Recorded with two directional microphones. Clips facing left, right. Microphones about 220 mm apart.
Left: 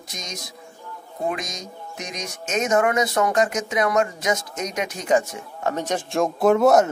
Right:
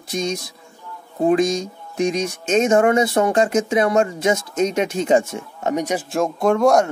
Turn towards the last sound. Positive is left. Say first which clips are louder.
# even
turn(degrees=5)  # may be behind; listen again after turning